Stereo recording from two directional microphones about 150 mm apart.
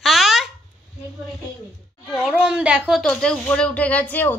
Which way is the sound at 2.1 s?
5° right (ahead or behind).